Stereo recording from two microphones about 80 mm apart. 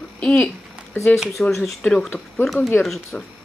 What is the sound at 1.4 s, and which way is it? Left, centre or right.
Speech, centre.